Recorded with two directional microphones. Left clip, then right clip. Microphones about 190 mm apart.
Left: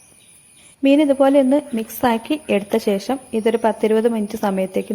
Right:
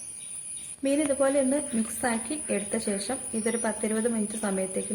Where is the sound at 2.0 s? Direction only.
40° left (ahead or behind).